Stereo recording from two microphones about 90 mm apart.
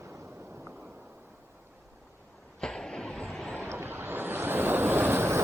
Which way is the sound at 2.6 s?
5° left (ahead or behind).